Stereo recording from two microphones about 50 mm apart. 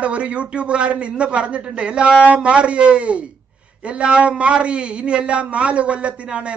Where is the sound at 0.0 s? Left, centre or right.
Right.